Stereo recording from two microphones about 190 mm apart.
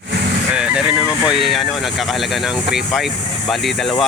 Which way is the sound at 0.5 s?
5° right (ahead or behind).